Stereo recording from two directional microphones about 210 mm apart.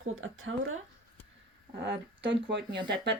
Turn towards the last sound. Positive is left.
turn(degrees=-50)  # may be behind; listen again after turning